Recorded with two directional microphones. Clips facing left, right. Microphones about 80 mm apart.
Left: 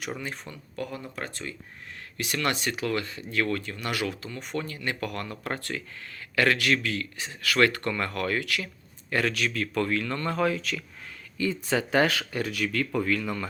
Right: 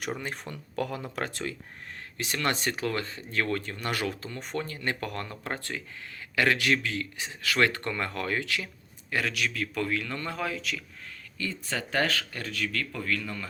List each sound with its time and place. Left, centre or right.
0.5 s speech: right
2.1 s speech: right
9.0 s speech: centre
11.3 s speech: centre